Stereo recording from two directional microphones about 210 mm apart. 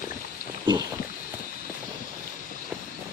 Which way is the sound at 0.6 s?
20° right (ahead or behind).